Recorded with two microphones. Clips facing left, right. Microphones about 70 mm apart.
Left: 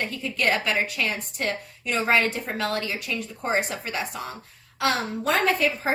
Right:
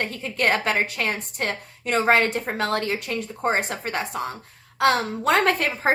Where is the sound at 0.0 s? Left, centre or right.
Right.